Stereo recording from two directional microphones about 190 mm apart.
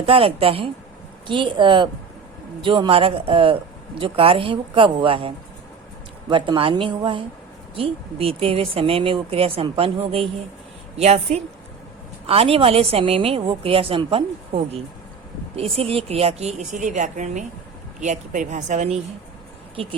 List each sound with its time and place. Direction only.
0.0 s a woman's voice: 30° right (ahead or behind)